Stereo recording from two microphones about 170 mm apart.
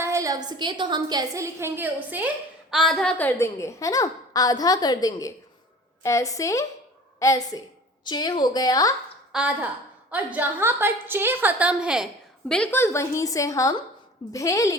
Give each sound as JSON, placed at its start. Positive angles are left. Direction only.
{"t": 0.0, "sound": "a woman's voice", "side_deg": -15}
{"t": 9.3, "sound": "a woman's voice", "side_deg": -5}
{"t": 12.5, "sound": "a woman's voice", "side_deg": 5}